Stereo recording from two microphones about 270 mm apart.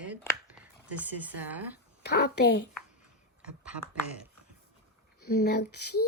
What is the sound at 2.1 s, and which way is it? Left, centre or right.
Speech, left.